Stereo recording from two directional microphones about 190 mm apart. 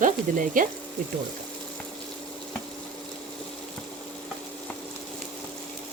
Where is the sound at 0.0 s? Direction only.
45° right (ahead or behind).